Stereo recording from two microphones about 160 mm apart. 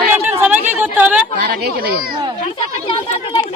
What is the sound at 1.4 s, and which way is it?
Speech, 75° right (ahead or behind).